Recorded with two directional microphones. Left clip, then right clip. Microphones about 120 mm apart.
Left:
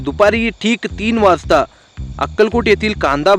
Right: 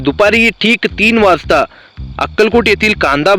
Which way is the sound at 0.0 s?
25° right (ahead or behind).